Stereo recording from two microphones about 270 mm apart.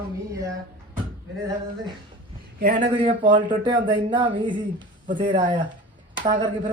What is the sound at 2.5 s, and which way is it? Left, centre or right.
Speech, right.